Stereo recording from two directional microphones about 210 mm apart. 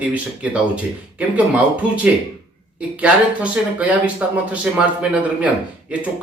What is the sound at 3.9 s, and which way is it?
A man's voice, 5° right (ahead or behind).